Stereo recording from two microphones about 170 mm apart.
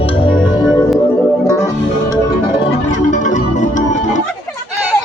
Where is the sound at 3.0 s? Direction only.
45° left (ahead or behind).